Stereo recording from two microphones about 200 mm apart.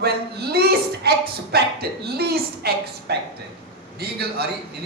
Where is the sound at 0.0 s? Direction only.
50° right (ahead or behind).